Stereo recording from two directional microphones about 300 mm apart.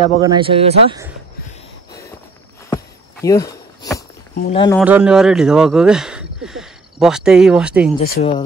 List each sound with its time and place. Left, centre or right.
0.2 s speech: centre
1.9 s a sound: centre
4.5 s speech: centre
4.7 s speech: centre
8.0 s speech: left